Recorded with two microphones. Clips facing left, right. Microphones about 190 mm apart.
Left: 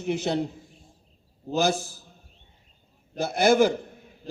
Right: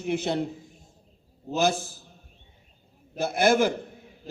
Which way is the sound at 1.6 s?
55° right (ahead or behind).